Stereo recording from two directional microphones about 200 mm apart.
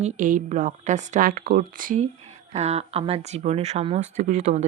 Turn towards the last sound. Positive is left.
turn(degrees=-35)  # may be behind; listen again after turning